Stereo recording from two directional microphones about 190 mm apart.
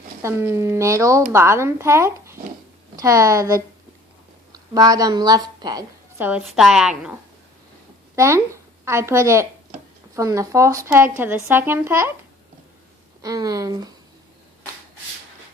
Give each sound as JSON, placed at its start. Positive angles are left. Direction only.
{"t": 0.2, "sound": "a woman's voice", "side_deg": -15}
{"t": 6.1, "sound": "a woman's voice", "side_deg": -10}
{"t": 8.1, "sound": "speech", "side_deg": -15}
{"t": 13.2, "sound": "speech", "side_deg": -20}